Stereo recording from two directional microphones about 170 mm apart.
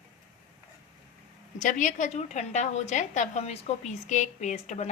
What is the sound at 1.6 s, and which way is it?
A woman's voice, 50° left (ahead or behind).